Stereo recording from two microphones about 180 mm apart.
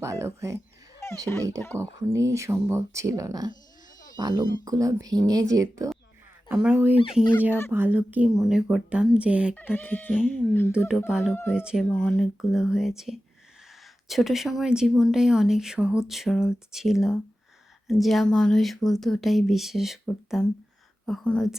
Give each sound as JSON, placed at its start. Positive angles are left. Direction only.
{"t": 0.0, "sound": "speech", "side_deg": -15}
{"t": 1.0, "sound": "a sound", "side_deg": 15}
{"t": 1.6, "sound": "speech", "side_deg": 10}
{"t": 2.0, "sound": "speech", "side_deg": -15}
{"t": 6.5, "sound": "speech", "side_deg": -5}
{"t": 9.6, "sound": "speech", "side_deg": 10}
{"t": 10.7, "sound": "speech", "side_deg": -5}
{"t": 11.3, "sound": "speech", "side_deg": 10}
{"t": 11.5, "sound": "speech", "side_deg": -5}
{"t": 14.1, "sound": "speech", "side_deg": 0}